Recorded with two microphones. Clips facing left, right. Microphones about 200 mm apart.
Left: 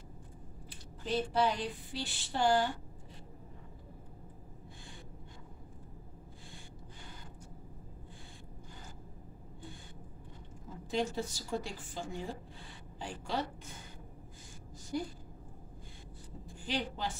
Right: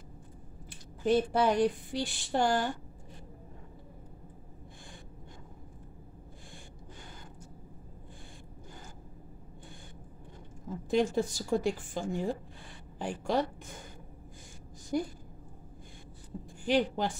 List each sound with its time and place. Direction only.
0.7 s a woman's voice: 50° right (ahead or behind)
10.9 s a woman's voice: 55° right (ahead or behind)
14.9 s a woman's voice: 55° right (ahead or behind)
16.6 s a woman's voice: 50° right (ahead or behind)